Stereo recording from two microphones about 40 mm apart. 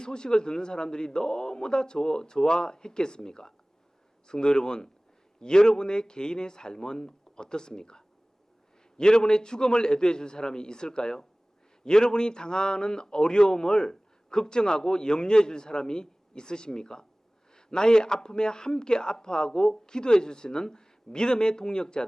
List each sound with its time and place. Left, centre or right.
0.0 s a man's voice: centre